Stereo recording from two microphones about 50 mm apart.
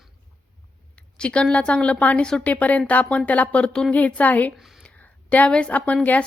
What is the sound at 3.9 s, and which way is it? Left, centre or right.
A woman's voice, left.